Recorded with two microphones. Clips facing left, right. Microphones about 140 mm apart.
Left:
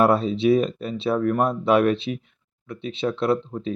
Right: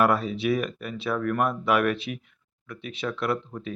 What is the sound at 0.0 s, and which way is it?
Speech, 25° left (ahead or behind).